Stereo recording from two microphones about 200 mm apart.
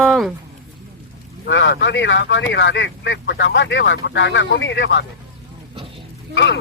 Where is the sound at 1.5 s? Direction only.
65° left (ahead or behind).